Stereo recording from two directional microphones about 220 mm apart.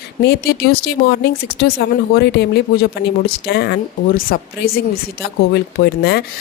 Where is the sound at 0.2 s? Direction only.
45° left (ahead or behind).